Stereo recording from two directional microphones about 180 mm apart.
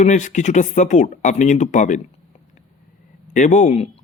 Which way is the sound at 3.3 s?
40° left (ahead or behind).